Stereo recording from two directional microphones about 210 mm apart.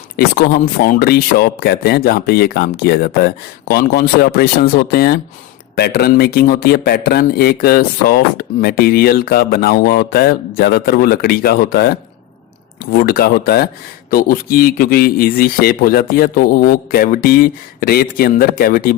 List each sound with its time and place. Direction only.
0.2 s speech: 45° left (ahead or behind)